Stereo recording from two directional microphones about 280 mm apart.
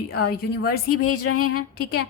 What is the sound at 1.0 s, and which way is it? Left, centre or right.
Speech, left.